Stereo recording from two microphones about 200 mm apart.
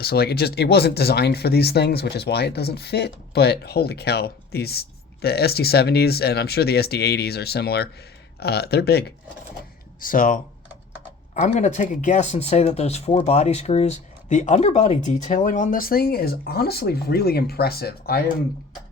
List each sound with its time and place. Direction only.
0.0 s speech: 50° left (ahead or behind)
10.0 s speech: 45° left (ahead or behind)